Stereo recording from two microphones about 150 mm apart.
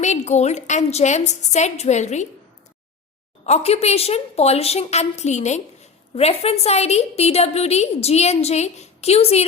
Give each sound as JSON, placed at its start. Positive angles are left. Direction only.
{"t": 0.0, "sound": "a woman's voice", "side_deg": 50}
{"t": 3.4, "sound": "a woman's voice", "side_deg": 45}